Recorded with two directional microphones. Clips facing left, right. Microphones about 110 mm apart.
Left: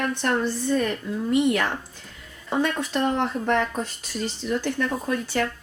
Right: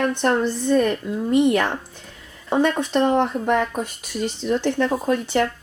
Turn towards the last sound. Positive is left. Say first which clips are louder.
# right 5 dB
turn(degrees=-20)  # may be behind; listen again after turning